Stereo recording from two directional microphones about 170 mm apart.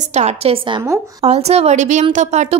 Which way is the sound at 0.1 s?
40° right (ahead or behind).